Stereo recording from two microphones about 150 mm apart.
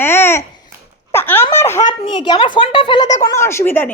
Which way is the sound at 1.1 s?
15° left (ahead or behind).